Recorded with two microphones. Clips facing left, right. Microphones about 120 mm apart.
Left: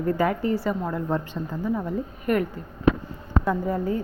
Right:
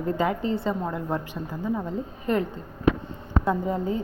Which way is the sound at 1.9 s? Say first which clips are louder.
Left 2 dB; 25° right (ahead or behind).